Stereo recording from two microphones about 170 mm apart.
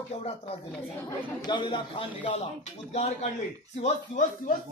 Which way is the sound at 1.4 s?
25° left (ahead or behind).